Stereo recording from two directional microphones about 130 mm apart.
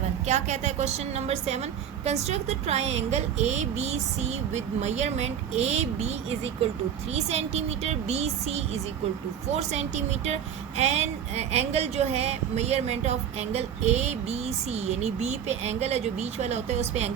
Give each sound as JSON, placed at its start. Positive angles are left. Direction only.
{"t": 0.3, "sound": "speech", "side_deg": -60}